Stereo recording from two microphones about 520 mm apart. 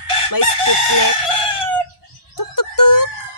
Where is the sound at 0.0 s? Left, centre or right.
Left.